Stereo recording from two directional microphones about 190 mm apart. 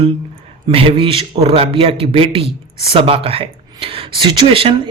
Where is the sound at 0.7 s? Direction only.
30° right (ahead or behind).